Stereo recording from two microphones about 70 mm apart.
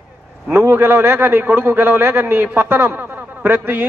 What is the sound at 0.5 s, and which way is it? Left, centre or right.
A man's voice, right.